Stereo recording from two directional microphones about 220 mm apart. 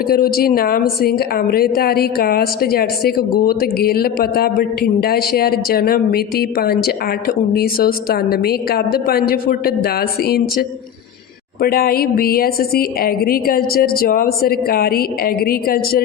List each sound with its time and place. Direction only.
0.1 s a woman's voice: 45° left (ahead or behind)